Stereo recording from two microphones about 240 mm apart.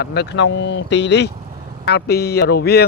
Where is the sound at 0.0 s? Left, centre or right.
Left.